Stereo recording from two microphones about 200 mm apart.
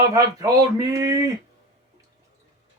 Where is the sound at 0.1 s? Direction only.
15° right (ahead or behind).